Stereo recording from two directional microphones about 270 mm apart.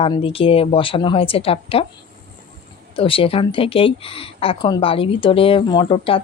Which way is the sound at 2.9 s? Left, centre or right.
Centre.